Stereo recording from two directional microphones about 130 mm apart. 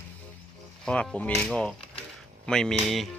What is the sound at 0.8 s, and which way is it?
Speech, 5° left (ahead or behind).